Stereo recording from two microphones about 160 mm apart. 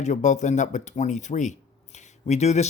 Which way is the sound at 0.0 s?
50° left (ahead or behind).